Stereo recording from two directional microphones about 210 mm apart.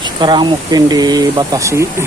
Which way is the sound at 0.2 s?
20° right (ahead or behind).